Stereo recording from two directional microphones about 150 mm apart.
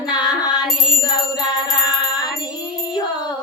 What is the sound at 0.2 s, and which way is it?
Music, 25° left (ahead or behind).